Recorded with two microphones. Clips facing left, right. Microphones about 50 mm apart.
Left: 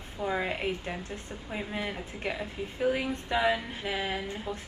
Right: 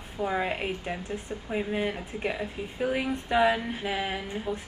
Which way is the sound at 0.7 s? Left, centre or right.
Right.